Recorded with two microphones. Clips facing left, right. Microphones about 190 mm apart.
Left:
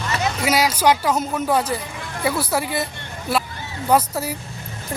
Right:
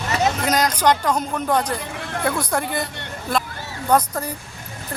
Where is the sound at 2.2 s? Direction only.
5° left (ahead or behind).